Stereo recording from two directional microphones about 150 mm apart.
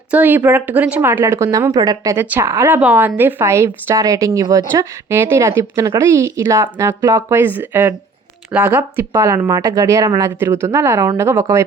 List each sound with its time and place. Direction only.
0.1 s speech: 10° right (ahead or behind)